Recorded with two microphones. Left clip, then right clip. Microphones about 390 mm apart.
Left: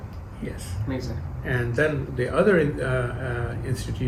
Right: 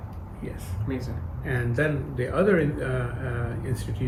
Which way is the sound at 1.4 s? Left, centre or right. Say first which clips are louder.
Left 3 dB; left.